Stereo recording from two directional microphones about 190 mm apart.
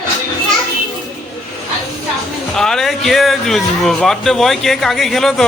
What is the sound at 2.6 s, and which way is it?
A man's voice, centre (ahead or behind).